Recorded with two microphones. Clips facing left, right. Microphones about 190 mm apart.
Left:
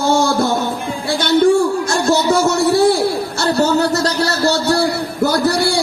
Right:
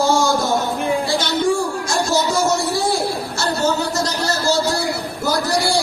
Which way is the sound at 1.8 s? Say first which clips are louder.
Left 4 dB; 60° left (ahead or behind).